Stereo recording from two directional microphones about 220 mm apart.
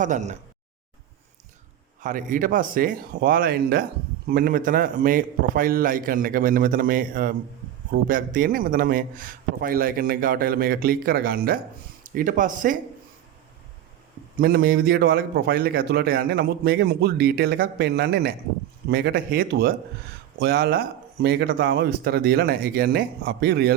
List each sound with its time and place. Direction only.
0.0 s a man's voice: 35° right (ahead or behind)
2.0 s a man's voice: 35° right (ahead or behind)
14.3 s a man's voice: 45° right (ahead or behind)